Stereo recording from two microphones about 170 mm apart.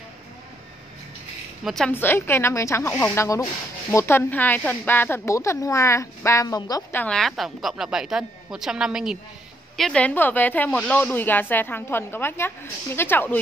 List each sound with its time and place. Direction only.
1.6 s a woman's voice: centre (ahead or behind)
1.9 s a woman's voice: 10° left (ahead or behind)
7.0 s a woman's voice: 5° left (ahead or behind)